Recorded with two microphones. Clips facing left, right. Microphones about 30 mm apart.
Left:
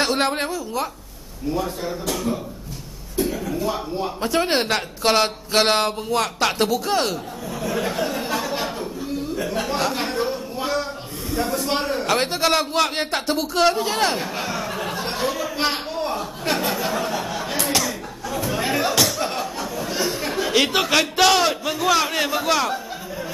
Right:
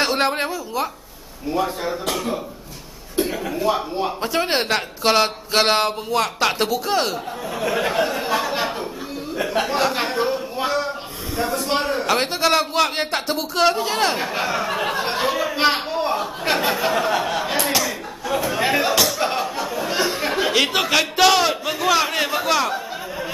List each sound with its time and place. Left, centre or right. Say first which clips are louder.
0.0 s a woman's voice: right 1 dB; centre
1.5 s speech: right 3 dB; right
3.4 s speech: right 3 dB; right
4.2 s speech: left 2 dB; centre
7.6 s speech: right 3 dB; right; by 14.2 s centre
14.2 s speech: right 4 dB; centre
18.9 s a sound: right 1 dB; centre
19.2 s a sound: right 3 dB; centre
20.5 s speech: left 2 dB; centre